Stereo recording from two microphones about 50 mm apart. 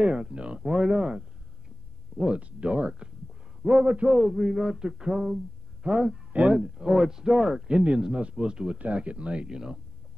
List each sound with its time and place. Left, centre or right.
0.0 s a man's voice: centre
2.3 s speech: right
4.1 s a man's voice: centre